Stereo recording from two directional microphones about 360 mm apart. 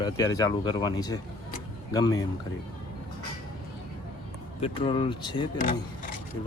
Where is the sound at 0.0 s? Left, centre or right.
Centre.